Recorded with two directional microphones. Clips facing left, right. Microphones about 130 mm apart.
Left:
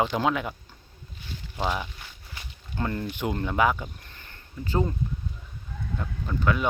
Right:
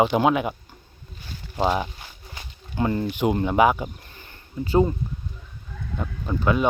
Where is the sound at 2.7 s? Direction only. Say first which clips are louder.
Right 6 dB; 15° right (ahead or behind).